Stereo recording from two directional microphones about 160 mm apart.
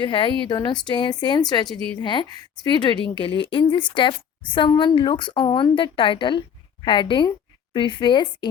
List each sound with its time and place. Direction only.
0.0 s a woman's voice: 30° left (ahead or behind)